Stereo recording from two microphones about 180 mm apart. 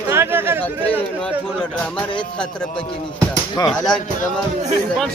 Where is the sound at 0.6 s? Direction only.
10° left (ahead or behind).